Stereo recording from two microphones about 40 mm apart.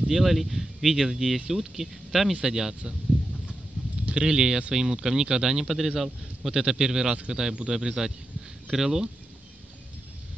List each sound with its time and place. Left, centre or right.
0.0 s speech: centre
4.0 s speech: right